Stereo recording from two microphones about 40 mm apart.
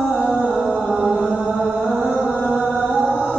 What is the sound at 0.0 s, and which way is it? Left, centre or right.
Music, right.